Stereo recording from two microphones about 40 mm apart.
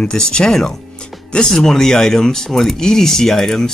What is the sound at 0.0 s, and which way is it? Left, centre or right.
Speech, centre.